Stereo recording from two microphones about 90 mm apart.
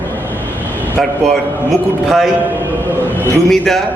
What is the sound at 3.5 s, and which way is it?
Speech, 5° left (ahead or behind).